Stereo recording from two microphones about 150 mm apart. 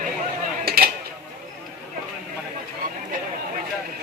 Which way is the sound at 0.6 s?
90° right.